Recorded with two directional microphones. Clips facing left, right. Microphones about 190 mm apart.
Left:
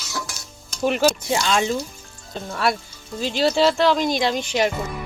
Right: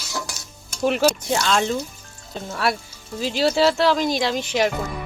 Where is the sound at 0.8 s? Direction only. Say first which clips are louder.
Even; centre (ahead or behind).